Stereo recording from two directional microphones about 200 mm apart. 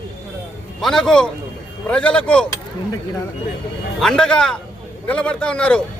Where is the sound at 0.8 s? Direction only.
Centre (ahead or behind).